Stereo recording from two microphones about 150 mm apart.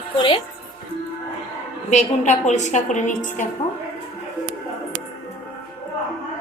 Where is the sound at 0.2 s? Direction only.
35° left (ahead or behind).